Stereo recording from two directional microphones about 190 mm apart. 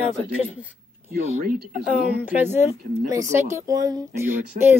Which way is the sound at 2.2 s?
10° right (ahead or behind).